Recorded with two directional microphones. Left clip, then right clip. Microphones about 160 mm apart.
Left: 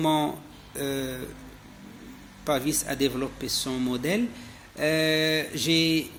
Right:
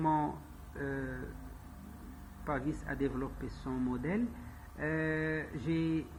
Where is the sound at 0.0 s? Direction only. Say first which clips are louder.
Left 7 dB; 40° left (ahead or behind).